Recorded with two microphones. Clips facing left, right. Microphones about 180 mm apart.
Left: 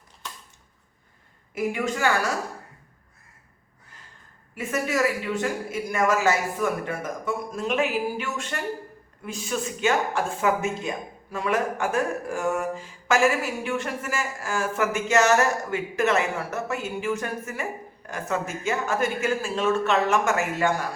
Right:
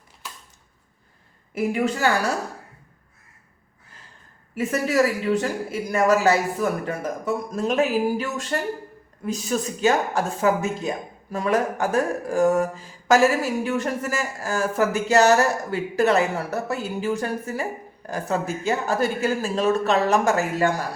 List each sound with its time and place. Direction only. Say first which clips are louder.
1.5 s speech: right 3 dB; 35° right (ahead or behind)
4.5 s speech: right 5 dB; 35° right (ahead or behind)